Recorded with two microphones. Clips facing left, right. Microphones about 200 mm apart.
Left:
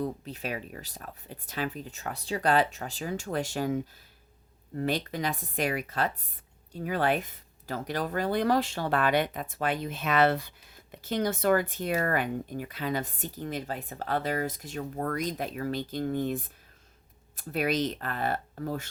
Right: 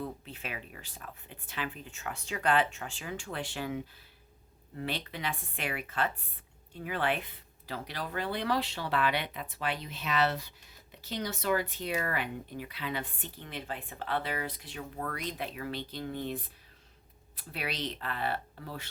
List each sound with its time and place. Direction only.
0.0 s speech: 40° left (ahead or behind)